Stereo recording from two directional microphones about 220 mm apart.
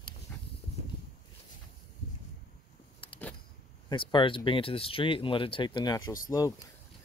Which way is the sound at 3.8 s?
20° left (ahead or behind).